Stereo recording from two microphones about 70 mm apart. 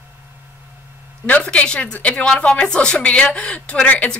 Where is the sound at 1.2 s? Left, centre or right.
Centre.